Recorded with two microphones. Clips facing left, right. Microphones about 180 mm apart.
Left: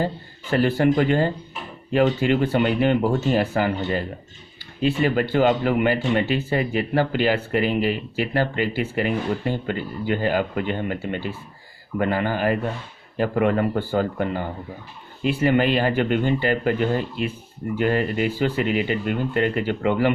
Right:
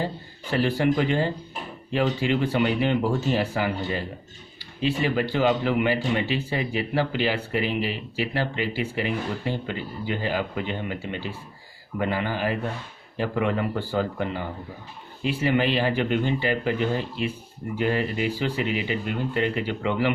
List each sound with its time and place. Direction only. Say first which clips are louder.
0.5 s speech: left 4 dB; 50° left (ahead or behind)
4.8 s speech: left 3 dB; 50° left (ahead or behind)
17.7 s speech: left 3 dB; 50° left (ahead or behind)